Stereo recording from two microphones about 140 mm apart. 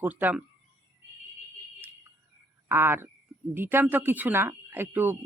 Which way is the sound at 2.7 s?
15° right (ahead or behind).